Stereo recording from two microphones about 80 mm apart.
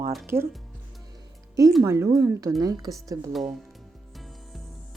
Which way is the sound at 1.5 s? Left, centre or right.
Right.